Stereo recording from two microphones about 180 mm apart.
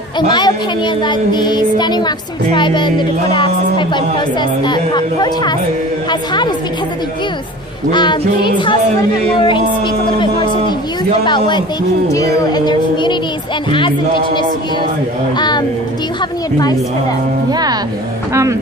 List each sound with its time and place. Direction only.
0.2 s a child's voice: 25° left (ahead or behind)
7.9 s a child's voice: 25° left (ahead or behind)
15.4 s a child's voice: 25° left (ahead or behind)
17.5 s speech: 20° right (ahead or behind)